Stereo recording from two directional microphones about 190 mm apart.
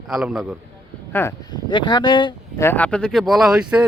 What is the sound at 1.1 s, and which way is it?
Speech, 15° left (ahead or behind).